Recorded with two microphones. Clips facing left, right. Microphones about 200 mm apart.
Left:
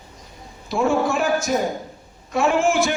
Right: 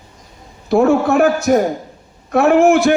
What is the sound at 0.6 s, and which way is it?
A man's voice, 60° right (ahead or behind).